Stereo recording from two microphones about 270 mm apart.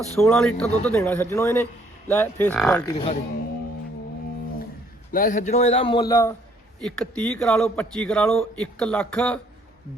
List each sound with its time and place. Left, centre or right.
0.2 s a man's voice: centre
2.8 s a man's voice: centre
5.1 s a man's voice: left; by 9.4 s centre